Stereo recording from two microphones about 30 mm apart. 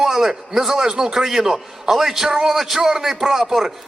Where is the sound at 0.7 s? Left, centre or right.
Centre.